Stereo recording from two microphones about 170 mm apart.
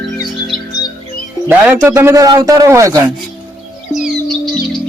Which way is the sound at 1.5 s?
15° right (ahead or behind).